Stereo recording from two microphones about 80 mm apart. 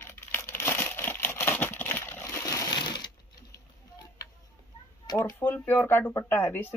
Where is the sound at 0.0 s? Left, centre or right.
Left.